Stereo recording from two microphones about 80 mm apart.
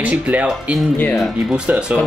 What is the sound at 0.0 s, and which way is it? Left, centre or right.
Speech, centre.